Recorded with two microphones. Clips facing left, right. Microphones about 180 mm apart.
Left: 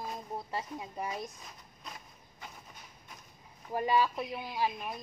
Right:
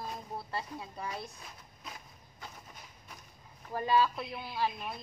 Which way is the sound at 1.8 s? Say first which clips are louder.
Even; centre (ahead or behind).